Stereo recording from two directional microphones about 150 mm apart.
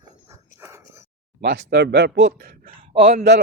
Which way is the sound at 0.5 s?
20° right (ahead or behind).